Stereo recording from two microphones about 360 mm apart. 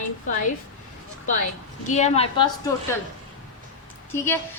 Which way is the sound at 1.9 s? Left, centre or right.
Centre.